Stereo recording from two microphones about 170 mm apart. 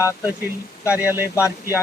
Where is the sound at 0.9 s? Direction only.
10° right (ahead or behind).